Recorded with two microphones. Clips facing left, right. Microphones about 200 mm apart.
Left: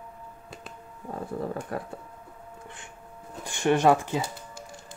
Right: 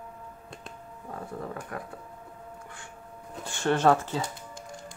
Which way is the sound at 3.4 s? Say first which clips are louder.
Left 2 dB; 15° left (ahead or behind).